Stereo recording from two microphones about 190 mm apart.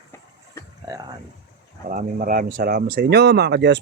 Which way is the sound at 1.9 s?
45° right (ahead or behind).